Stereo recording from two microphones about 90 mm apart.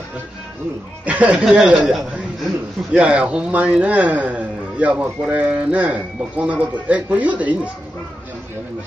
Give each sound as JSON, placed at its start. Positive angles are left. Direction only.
{"t": 1.0, "sound": "a man's voice", "side_deg": -15}
{"t": 2.9, "sound": "speech", "side_deg": -15}